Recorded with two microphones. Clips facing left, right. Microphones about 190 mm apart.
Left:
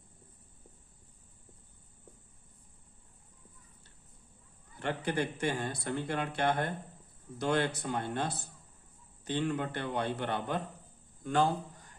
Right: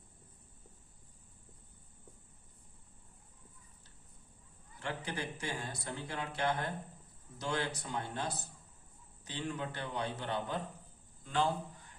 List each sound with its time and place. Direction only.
4.8 s speech: 60° left (ahead or behind)
11.2 s a man's voice: 50° left (ahead or behind)